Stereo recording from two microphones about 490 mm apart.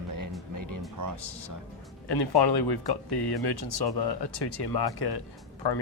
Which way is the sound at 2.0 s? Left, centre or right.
Left.